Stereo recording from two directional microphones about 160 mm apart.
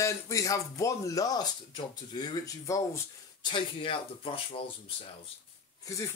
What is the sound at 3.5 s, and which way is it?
Speech, 35° left (ahead or behind).